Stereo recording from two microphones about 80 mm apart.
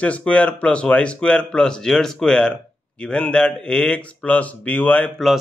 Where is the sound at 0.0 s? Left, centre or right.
Centre.